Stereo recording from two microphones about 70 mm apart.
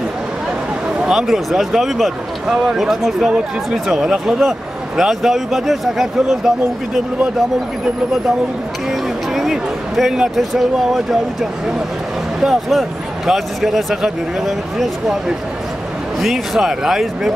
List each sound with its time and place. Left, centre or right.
1.0 s speech: centre
9.3 s speech: centre
12.4 s speech: centre